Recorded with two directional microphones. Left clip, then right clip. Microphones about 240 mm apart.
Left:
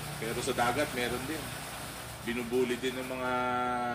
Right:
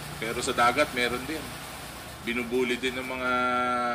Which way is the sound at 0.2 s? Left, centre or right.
Right.